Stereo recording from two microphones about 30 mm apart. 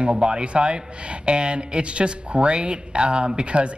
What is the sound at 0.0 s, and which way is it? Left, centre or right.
Speech, right.